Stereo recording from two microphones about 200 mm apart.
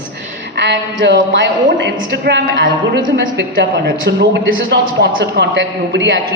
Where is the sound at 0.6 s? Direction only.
60° right (ahead or behind).